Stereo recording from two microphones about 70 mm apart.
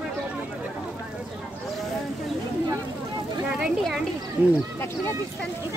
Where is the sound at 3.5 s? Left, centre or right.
Centre.